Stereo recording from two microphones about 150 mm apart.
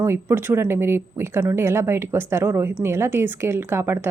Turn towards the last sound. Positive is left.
turn(degrees=-15)  # may be behind; listen again after turning